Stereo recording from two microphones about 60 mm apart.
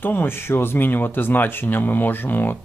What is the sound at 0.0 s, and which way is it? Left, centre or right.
Speech, left.